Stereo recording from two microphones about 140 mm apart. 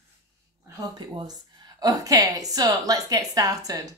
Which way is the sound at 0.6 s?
30° right (ahead or behind).